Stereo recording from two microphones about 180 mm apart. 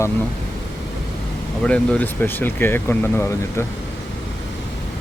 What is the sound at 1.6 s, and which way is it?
Speech, 5° left (ahead or behind).